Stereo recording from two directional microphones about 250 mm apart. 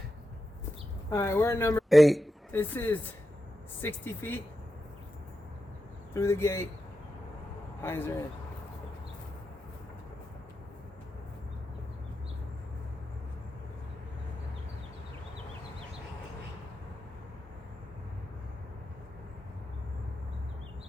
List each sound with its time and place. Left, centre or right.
1.1 s a woman's voice: centre
1.9 s a man's voice: centre
6.1 s a woman's voice: centre
7.8 s speech: centre